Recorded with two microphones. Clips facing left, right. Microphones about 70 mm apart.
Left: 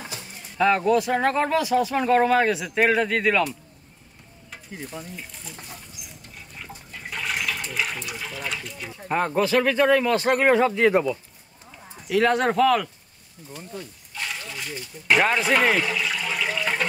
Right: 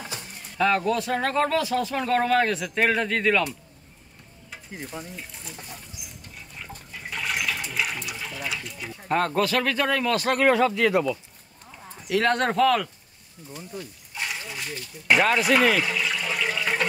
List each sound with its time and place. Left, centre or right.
0.6 s speech: centre
5.1 s speech: centre
6.9 s toilet flush: centre
9.1 s speech: centre
12.1 s speech: centre
14.1 s a sound: centre
14.7 s speech: centre